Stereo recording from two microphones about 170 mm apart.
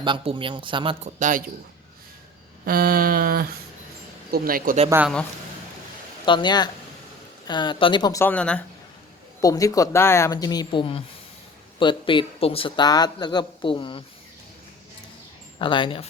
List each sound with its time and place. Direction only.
0.0 s speech: 30° right (ahead or behind)
1.2 s speech: 50° right (ahead or behind)
2.6 s a sound: 60° right (ahead or behind)
6.2 s speech: 25° left (ahead or behind)
8.2 s speech: 10° left (ahead or behind)
9.4 s speech: 20° left (ahead or behind)
15.5 s speech: 30° left (ahead or behind)